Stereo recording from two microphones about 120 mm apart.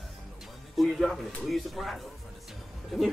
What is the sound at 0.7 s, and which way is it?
Speech, centre (ahead or behind).